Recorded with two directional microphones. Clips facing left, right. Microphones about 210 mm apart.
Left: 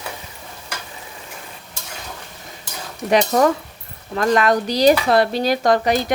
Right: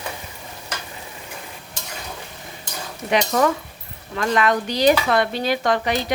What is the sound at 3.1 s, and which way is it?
A woman's voice, 40° left (ahead or behind).